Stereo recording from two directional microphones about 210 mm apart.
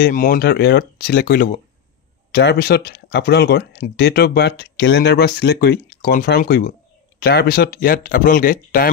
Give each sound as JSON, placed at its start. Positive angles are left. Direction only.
{"t": 0.0, "sound": "speech", "side_deg": 40}